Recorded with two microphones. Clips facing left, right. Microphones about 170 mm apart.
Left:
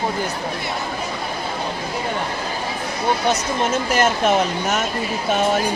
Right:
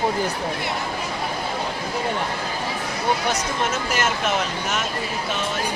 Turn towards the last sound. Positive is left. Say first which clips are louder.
# left 5 dB
turn(degrees=40)  # may be behind; listen again after turning